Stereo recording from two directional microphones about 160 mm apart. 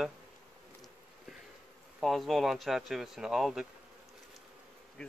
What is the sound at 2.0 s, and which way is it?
Speech, centre (ahead or behind).